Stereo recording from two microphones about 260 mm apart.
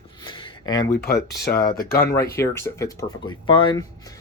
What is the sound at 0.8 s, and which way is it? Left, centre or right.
Speech, left.